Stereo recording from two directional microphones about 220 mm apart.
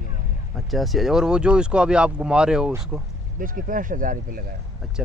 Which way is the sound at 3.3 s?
40° right (ahead or behind).